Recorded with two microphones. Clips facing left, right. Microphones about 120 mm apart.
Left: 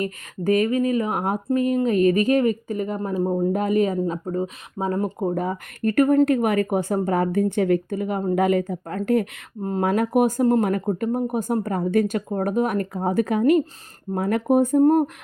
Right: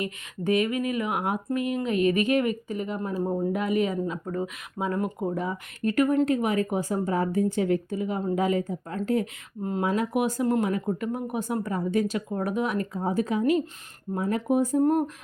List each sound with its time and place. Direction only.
0.0 s speech: 40° left (ahead or behind)
3.2 s speech: 20° left (ahead or behind)
3.5 s speech: 40° left (ahead or behind)
5.3 s speech: 50° left (ahead or behind); by 14.4 s 70° left (ahead or behind)
14.4 s speech: 55° left (ahead or behind)